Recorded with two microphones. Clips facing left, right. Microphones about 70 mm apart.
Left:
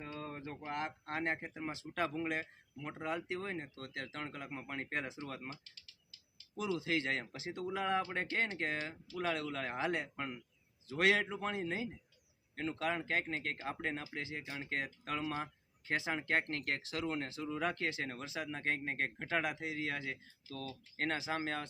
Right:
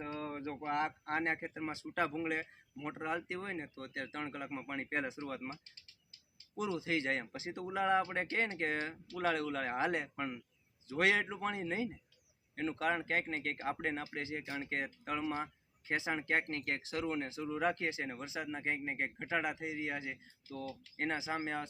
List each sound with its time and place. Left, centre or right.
0.0 s a sound: right
1.1 s speech: right
1.8 s speech: right
10.0 s speech: centre
10.8 s speech: right